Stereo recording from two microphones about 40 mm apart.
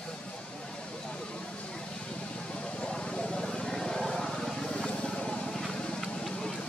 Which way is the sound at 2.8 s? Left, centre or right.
Centre.